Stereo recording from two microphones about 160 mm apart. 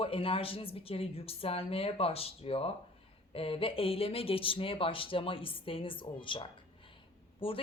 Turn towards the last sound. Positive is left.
turn(degrees=35)  # may be behind; listen again after turning